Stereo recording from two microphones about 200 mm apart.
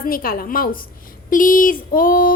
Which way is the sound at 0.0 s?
45° left (ahead or behind).